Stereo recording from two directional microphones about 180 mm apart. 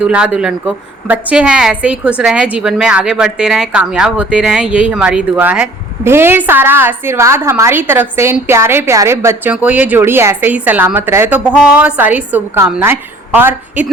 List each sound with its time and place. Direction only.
0.0 s a woman's voice: 5° right (ahead or behind)